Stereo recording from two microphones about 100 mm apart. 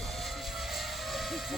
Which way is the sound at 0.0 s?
Centre (ahead or behind).